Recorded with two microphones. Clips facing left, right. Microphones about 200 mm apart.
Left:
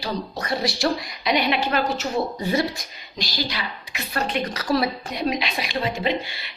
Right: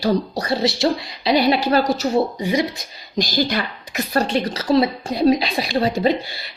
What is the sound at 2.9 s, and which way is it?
A woman's voice, 40° right (ahead or behind).